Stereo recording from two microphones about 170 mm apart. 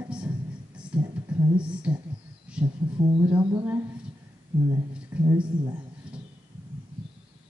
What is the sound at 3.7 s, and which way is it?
Speech, 15° right (ahead or behind).